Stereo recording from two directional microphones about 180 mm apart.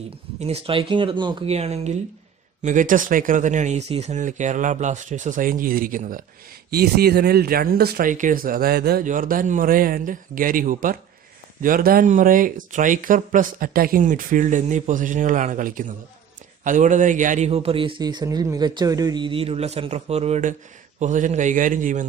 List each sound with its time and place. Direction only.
0.3 s speech: 35° right (ahead or behind)
6.7 s speech: 60° right (ahead or behind)
9.0 s a man's voice: 50° right (ahead or behind)